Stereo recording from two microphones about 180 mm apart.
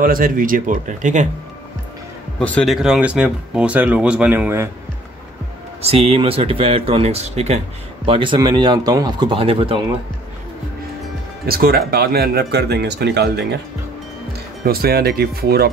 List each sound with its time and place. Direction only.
0.0 s speech: 50° right (ahead or behind)
2.3 s speech: 5° left (ahead or behind); by 4.6 s 10° right (ahead or behind)
6.0 s speech: 30° right (ahead or behind)
11.4 s speech: 55° right (ahead or behind)
14.6 s speech: 55° right (ahead or behind)